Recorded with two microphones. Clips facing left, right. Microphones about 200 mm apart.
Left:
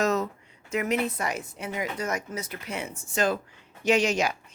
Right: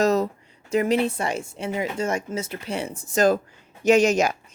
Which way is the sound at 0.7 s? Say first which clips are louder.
Right 6 dB; 30° right (ahead or behind).